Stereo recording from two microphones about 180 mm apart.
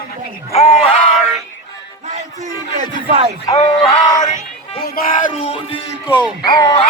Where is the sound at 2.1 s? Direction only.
40° right (ahead or behind).